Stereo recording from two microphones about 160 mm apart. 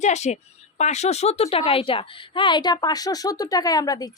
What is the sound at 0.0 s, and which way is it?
A woman's voice, 45° left (ahead or behind).